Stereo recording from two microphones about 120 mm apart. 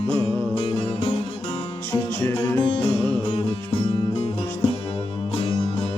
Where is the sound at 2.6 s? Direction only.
55° left (ahead or behind).